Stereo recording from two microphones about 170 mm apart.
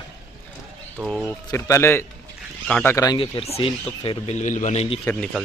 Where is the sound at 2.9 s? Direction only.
25° left (ahead or behind).